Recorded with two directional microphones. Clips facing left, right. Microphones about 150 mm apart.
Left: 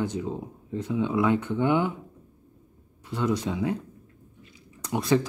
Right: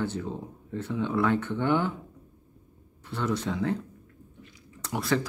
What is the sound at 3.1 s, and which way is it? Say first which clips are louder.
Speech: left 3 dB; 15° left (ahead or behind).